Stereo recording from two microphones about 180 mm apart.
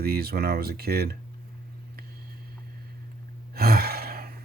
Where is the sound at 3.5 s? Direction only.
60° right (ahead or behind).